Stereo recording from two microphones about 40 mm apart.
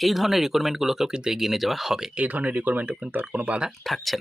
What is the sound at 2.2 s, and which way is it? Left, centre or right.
Speech, right.